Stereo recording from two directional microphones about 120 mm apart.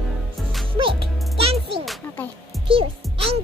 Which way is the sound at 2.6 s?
50° right (ahead or behind).